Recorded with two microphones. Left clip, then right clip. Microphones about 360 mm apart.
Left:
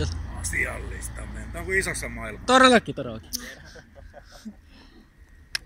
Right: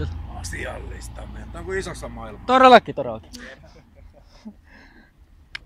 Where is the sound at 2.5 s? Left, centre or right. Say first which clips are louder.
Right 5 dB; centre.